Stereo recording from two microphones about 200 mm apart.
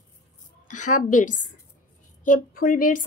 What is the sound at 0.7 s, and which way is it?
A woman's voice, 40° left (ahead or behind).